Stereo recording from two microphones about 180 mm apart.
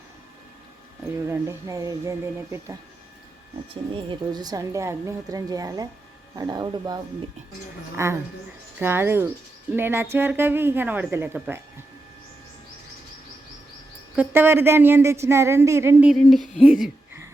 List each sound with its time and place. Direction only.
1.3 s speech: 15° right (ahead or behind)
4.1 s a woman's voice: 20° right (ahead or behind)
14.2 s speech: 10° right (ahead or behind)
16.1 s speech: centre (ahead or behind)